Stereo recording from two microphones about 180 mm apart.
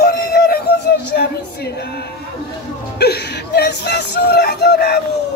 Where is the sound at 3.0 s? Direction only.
65° left (ahead or behind).